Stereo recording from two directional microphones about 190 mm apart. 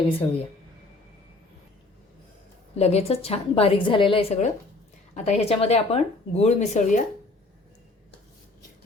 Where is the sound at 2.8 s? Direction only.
35° left (ahead or behind).